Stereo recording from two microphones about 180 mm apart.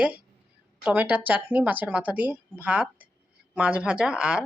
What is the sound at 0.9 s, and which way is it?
Speech, 10° right (ahead or behind).